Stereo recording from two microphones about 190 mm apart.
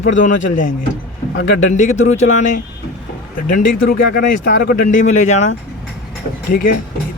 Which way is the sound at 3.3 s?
45° left (ahead or behind).